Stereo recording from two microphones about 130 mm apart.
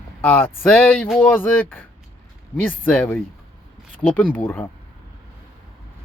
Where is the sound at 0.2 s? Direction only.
15° left (ahead or behind).